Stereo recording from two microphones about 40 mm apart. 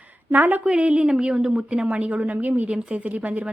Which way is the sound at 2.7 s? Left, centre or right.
Right.